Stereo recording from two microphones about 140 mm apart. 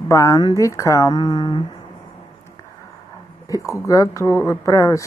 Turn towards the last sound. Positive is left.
turn(degrees=20)  # may be behind; listen again after turning